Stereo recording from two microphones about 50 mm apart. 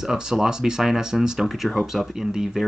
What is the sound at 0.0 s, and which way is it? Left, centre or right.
Speech, centre.